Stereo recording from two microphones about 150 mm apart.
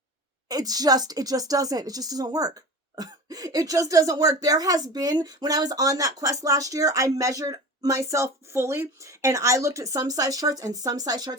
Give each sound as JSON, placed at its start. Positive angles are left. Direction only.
{"t": 0.4, "sound": "speech", "side_deg": -25}